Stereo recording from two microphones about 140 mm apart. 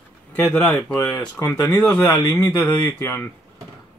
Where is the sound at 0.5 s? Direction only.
10° left (ahead or behind).